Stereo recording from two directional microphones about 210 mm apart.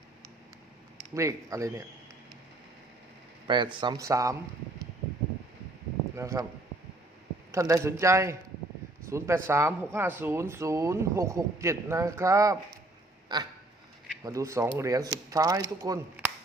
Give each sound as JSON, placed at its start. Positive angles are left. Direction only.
{"t": 1.1, "sound": "speech", "side_deg": -15}
{"t": 3.4, "sound": "speech", "side_deg": -20}
{"t": 6.1, "sound": "speech", "side_deg": -15}
{"t": 7.5, "sound": "speech", "side_deg": -15}
{"t": 13.2, "sound": "quack", "side_deg": -20}
{"t": 14.3, "sound": "speech", "side_deg": -15}